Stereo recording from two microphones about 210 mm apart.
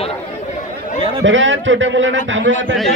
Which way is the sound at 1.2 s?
65° right (ahead or behind).